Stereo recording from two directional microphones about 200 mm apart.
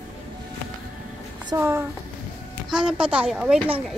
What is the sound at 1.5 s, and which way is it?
A woman's voice, 10° right (ahead or behind).